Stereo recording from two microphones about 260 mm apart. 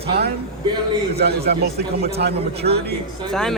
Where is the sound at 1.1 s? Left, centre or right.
Right.